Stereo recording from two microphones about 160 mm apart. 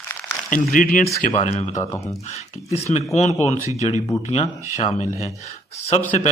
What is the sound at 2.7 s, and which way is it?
Speech, 45° left (ahead or behind).